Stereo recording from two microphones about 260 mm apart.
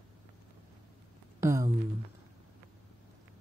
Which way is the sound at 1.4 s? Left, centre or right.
Centre.